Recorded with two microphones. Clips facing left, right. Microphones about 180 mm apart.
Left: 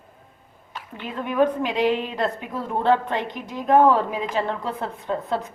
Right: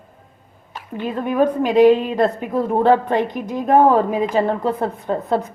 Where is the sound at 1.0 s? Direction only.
40° right (ahead or behind).